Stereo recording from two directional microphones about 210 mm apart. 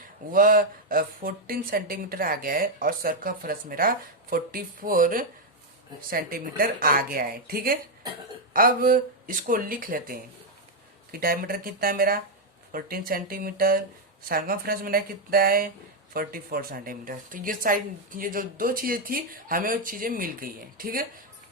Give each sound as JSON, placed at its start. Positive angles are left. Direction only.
{"t": 0.3, "sound": "speech", "side_deg": -40}